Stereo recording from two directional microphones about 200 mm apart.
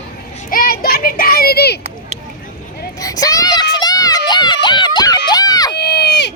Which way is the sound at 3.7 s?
20° left (ahead or behind).